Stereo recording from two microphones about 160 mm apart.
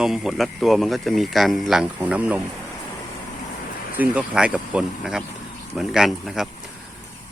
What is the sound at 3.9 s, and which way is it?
Speech, 10° right (ahead or behind).